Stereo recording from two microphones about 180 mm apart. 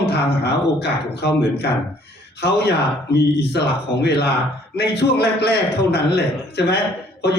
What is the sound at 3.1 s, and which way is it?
Speech, 65° left (ahead or behind).